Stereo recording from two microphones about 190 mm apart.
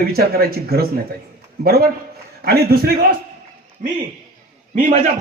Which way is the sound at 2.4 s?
55° right (ahead or behind).